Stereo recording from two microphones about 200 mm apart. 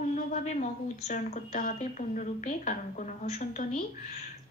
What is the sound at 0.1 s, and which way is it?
Speech, 35° left (ahead or behind).